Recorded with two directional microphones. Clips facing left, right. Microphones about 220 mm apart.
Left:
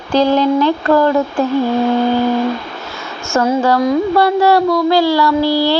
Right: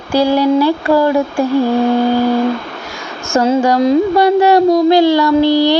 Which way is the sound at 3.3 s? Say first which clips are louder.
Right 2 dB; 15° right (ahead or behind).